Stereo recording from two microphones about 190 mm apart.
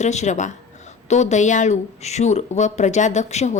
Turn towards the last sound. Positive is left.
turn(degrees=35)  # may be behind; listen again after turning